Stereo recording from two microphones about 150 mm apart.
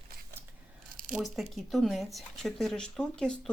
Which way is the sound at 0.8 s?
70° right (ahead or behind).